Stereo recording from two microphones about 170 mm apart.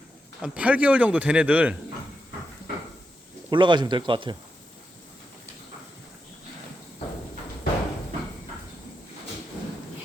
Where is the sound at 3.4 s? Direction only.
25° right (ahead or behind).